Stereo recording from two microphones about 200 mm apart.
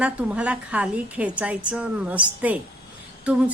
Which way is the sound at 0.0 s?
5° right (ahead or behind).